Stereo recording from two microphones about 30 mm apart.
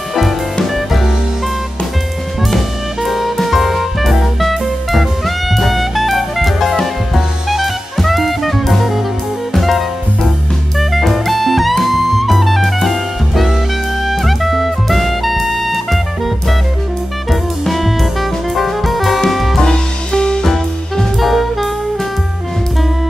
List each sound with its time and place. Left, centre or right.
3.0 s music: centre
7.2 s jazz: centre
9.5 s music: centre
10.8 s jazz: centre
14.0 s music: centre
17.3 s music: centre
19.6 s music: left
20.4 s music: centre